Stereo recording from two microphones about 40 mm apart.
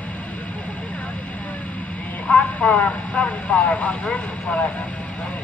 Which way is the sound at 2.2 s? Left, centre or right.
Left.